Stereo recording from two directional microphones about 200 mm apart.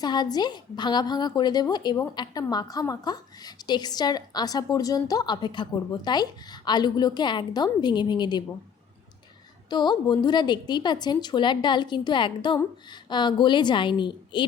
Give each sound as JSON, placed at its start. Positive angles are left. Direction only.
{"t": 0.0, "sound": "a woman's voice", "side_deg": 20}
{"t": 9.6, "sound": "a woman's voice", "side_deg": 20}